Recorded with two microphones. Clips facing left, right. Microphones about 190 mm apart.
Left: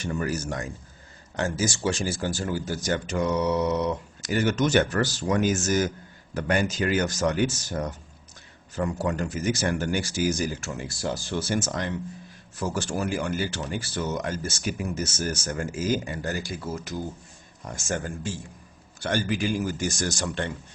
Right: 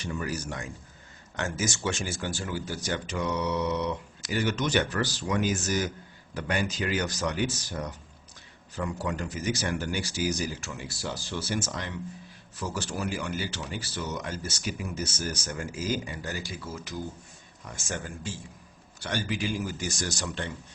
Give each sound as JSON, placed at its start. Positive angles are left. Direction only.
{"t": 0.0, "sound": "speech", "side_deg": 50}
{"t": 1.4, "sound": "speech", "side_deg": 35}